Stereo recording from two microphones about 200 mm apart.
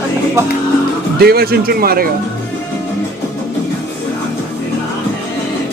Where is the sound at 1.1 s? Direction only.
50° right (ahead or behind).